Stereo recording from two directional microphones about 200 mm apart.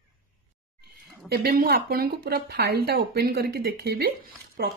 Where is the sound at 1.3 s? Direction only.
50° right (ahead or behind).